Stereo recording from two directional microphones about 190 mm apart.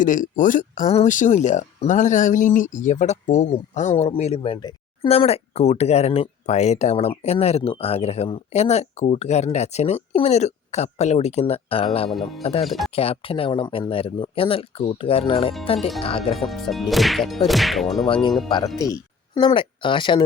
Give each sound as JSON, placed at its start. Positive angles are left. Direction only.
{"t": 0.0, "sound": "speech", "side_deg": 45}
{"t": 12.6, "sound": "whip", "side_deg": 0}
{"t": 12.9, "sound": "speech", "side_deg": 30}
{"t": 16.3, "sound": "whip", "side_deg": 0}
{"t": 18.1, "sound": "a woman's voice", "side_deg": 25}